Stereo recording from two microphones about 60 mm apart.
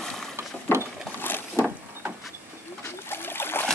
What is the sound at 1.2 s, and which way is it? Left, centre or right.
Boat, left.